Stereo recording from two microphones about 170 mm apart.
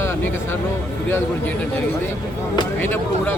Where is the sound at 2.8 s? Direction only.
10° left (ahead or behind).